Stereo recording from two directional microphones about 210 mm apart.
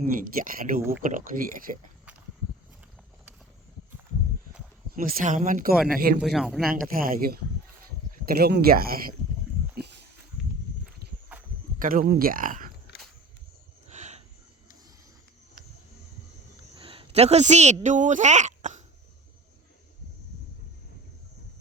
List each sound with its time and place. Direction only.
0.0 s speech: 40° right (ahead or behind)
4.9 s speech: 40° right (ahead or behind)
5.7 s speech: 5° right (ahead or behind)
6.7 s speech: 40° right (ahead or behind)
9.7 s pig: 55° right (ahead or behind)
11.8 s speech: 40° right (ahead or behind)
13.8 s a sound: 30° right (ahead or behind)
16.7 s a sound: 25° right (ahead or behind)
17.8 s speech: 35° right (ahead or behind)